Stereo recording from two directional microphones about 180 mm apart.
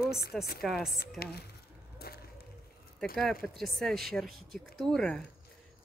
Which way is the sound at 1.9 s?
60° left (ahead or behind).